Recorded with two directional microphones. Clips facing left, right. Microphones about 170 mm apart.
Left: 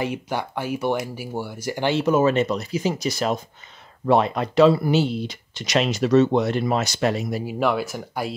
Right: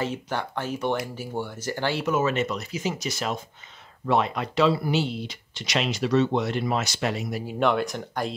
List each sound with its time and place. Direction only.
0.0 s speech: 15° left (ahead or behind)
2.0 s speech: 35° left (ahead or behind)
7.4 s speech: 5° left (ahead or behind)